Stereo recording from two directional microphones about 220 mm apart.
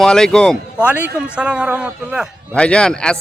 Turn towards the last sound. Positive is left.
turn(degrees=5)  # may be behind; listen again after turning